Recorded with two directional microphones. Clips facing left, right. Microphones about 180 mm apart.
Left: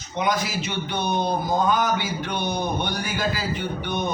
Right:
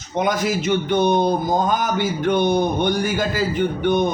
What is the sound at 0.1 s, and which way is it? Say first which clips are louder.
Speech: right 4 dB; 50° right (ahead or behind).